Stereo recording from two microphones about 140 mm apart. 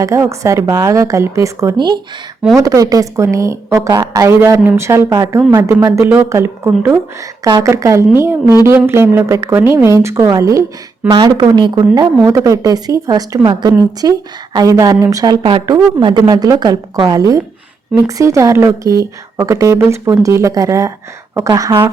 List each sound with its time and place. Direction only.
0.0 s a woman's voice: 20° right (ahead or behind)